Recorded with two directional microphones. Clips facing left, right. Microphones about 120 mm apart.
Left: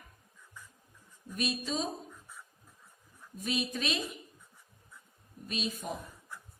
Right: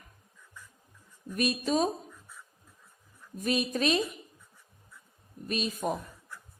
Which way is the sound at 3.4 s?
50° right (ahead or behind).